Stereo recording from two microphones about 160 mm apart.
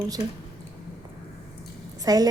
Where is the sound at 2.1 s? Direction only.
25° right (ahead or behind).